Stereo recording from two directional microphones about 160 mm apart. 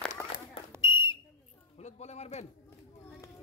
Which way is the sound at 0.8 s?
30° left (ahead or behind).